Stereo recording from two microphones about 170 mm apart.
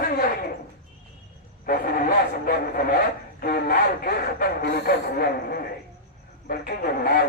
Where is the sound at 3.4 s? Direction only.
60° left (ahead or behind).